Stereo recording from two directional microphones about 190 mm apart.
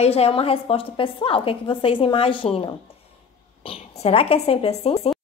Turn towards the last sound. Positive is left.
turn(degrees=30)  # may be behind; listen again after turning